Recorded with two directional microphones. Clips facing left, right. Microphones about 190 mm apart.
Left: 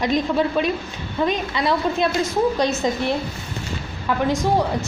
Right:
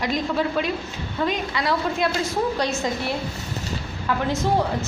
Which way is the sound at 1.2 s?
20° left (ahead or behind).